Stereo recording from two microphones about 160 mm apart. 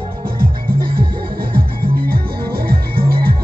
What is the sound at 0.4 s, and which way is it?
Music, 65° right (ahead or behind).